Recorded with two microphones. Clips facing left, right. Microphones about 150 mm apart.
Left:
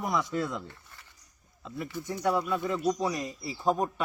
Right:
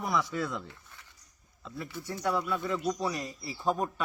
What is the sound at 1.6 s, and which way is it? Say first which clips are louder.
Speech: left 3 dB; 20° left (ahead or behind).